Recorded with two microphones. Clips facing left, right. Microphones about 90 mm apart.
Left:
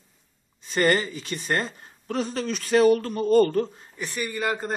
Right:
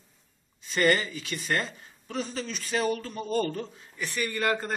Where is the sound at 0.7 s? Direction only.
40° left (ahead or behind); by 3.6 s 60° left (ahead or behind).